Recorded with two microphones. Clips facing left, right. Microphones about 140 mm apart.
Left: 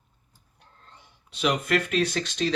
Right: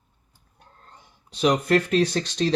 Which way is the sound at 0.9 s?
35° right (ahead or behind).